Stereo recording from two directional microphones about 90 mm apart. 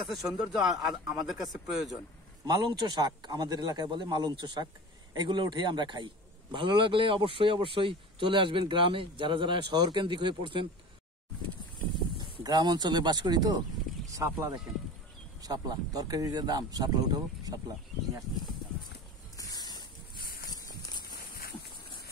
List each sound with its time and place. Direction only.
0.4 s speech: 5° right (ahead or behind)
2.4 s a man's voice: 50° right (ahead or behind); by 10.7 s 65° right (ahead or behind)
12.2 s speech: 50° right (ahead or behind)
14.1 s speech: 35° right (ahead or behind)
15.4 s a man's voice: 45° right (ahead or behind)
19.3 s a sound: 45° left (ahead or behind)